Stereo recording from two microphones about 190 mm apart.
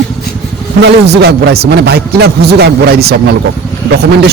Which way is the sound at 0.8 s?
60° right (ahead or behind).